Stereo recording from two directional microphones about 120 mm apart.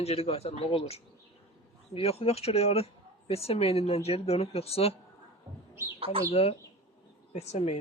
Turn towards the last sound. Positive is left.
turn(degrees=60)  # may be behind; listen again after turning